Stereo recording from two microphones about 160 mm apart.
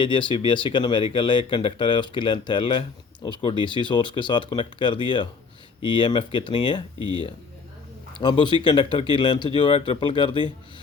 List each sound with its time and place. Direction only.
0.0 s speech: 30° left (ahead or behind)
7.0 s speech: 25° right (ahead or behind)
8.2 s speech: 30° left (ahead or behind)